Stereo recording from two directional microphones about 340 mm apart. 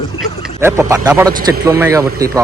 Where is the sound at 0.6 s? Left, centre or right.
Centre.